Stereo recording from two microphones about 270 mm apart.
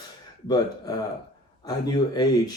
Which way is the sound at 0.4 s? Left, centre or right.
Centre.